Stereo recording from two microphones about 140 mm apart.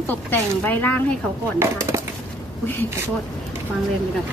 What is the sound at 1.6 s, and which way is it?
Speech, 20° right (ahead or behind).